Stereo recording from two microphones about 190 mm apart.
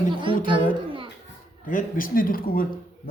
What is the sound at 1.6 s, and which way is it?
Speech, 45° left (ahead or behind).